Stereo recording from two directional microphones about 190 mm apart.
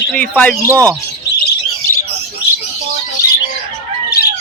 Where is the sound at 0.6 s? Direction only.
15° right (ahead or behind).